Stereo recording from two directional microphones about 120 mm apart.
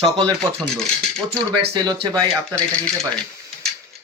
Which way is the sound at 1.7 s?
40° right (ahead or behind).